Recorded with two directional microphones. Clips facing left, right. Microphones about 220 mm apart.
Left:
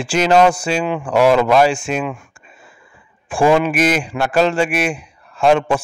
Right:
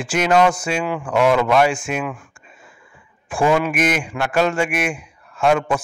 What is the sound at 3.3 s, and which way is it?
A man's voice, 30° left (ahead or behind).